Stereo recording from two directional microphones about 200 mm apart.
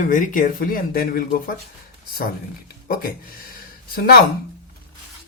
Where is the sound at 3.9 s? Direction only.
50° left (ahead or behind).